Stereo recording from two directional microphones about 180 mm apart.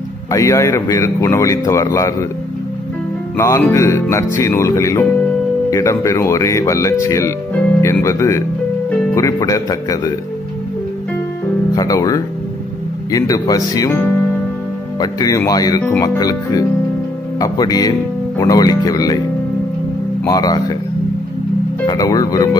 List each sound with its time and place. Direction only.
0.3 s speech: 15° left (ahead or behind)
3.3 s speech: 15° left (ahead or behind)
11.7 s speech: 20° left (ahead or behind)
15.9 s speech: 10° left (ahead or behind)
16.2 s speech: 20° left (ahead or behind)
20.2 s speech: 20° left (ahead or behind)
21.8 s speech: 20° left (ahead or behind)